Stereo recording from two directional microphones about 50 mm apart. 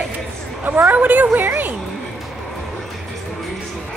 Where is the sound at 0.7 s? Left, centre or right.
Right.